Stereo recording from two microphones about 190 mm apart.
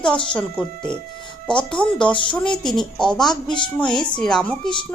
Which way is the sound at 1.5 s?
5° left (ahead or behind).